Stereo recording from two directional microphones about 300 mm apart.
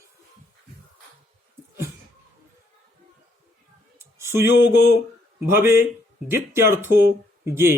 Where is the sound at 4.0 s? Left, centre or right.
Centre.